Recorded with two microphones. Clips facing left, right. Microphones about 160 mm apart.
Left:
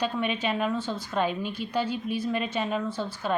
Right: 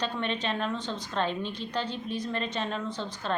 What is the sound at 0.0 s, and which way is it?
A woman's voice, 10° left (ahead or behind).